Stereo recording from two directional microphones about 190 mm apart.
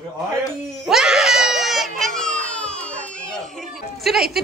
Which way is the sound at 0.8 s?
5° right (ahead or behind).